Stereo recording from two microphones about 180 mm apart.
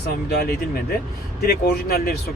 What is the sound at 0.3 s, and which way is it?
Speech, 60° left (ahead or behind).